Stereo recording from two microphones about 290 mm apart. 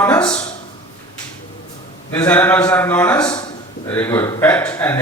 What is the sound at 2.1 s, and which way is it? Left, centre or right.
A man's voice, centre.